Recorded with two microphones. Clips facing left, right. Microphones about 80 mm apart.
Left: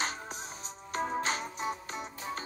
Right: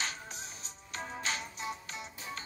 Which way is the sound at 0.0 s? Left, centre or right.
Left.